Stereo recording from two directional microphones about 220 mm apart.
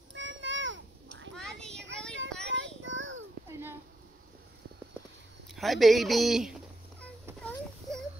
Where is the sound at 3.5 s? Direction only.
10° right (ahead or behind).